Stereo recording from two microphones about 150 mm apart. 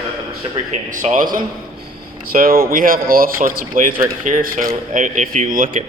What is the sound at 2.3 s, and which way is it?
Speech, 75° right (ahead or behind).